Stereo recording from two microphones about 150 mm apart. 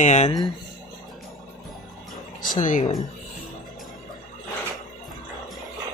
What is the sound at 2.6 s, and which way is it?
Speech, 60° left (ahead or behind).